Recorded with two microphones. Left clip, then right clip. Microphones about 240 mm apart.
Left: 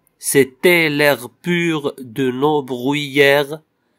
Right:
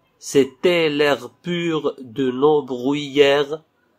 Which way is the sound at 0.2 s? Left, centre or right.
Left.